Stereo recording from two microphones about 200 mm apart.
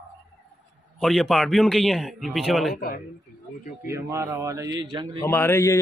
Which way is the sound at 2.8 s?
45° left (ahead or behind).